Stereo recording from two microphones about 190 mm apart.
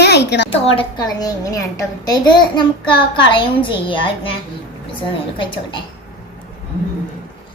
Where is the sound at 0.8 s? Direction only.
20° left (ahead or behind).